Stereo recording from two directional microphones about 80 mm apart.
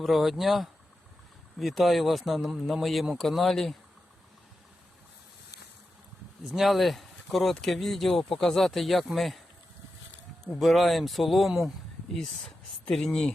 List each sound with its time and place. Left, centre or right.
0.0 s speech: centre
6.5 s speech: centre
10.6 s speech: centre